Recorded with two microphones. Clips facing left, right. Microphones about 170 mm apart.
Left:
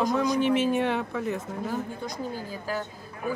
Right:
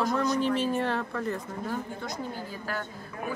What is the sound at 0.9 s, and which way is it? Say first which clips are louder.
Speech: left 2 dB; 5° left (ahead or behind).